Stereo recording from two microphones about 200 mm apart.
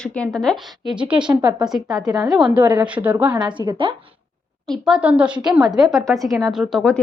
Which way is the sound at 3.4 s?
20° right (ahead or behind).